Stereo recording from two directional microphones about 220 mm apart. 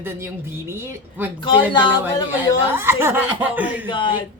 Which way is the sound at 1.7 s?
20° left (ahead or behind).